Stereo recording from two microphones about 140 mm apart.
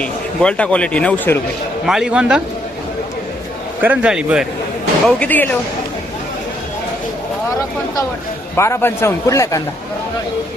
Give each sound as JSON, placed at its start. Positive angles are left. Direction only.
{"t": 0.0, "sound": "a man's voice", "side_deg": 10}
{"t": 1.9, "sound": "a man's voice", "side_deg": -5}
{"t": 3.8, "sound": "a man's voice", "side_deg": -10}
{"t": 5.0, "sound": "a man's voice", "side_deg": 10}
{"t": 8.5, "sound": "a man's voice", "side_deg": 20}